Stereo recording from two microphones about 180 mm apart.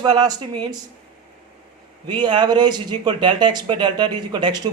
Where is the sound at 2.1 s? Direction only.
25° right (ahead or behind).